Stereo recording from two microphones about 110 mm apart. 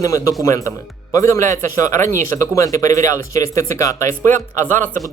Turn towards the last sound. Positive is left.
turn(degrees=20)  # may be behind; listen again after turning